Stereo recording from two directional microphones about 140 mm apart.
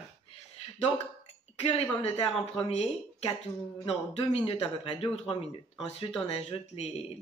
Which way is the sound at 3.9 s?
45° left (ahead or behind).